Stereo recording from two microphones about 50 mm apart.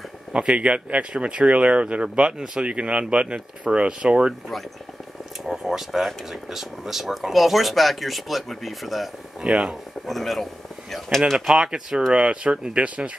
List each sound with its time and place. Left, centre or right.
0.3 s speech: right
5.5 s speech: centre
9.4 s speech: centre
10.0 s speech: centre
11.3 s speech: centre